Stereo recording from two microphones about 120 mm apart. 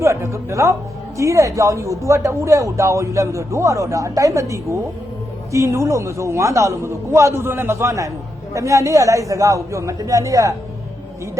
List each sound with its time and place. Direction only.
0.0 s a woman's voice: 25° right (ahead or behind)